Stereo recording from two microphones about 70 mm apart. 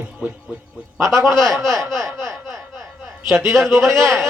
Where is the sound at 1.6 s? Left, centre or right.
Right.